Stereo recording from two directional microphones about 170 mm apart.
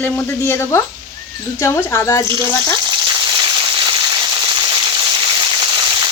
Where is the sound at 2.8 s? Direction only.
25° right (ahead or behind).